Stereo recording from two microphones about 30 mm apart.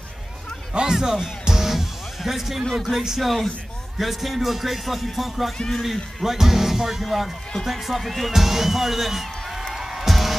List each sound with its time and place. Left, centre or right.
0.7 s speech: right
1.4 s music: centre
8.4 s speech: centre
9.8 s music: centre